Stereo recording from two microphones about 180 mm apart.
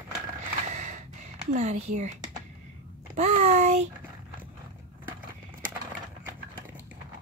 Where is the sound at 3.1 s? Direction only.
40° right (ahead or behind).